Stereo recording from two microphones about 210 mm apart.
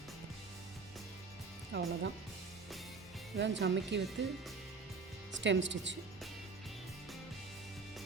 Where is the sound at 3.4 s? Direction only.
55° right (ahead or behind).